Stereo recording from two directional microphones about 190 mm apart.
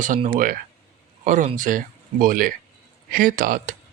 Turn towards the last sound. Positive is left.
turn(degrees=-45)  # may be behind; listen again after turning